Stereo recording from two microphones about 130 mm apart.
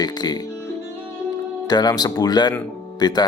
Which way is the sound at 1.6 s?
30° left (ahead or behind).